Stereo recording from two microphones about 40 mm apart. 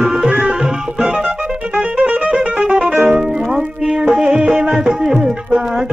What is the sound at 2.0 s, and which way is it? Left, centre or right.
Music, right.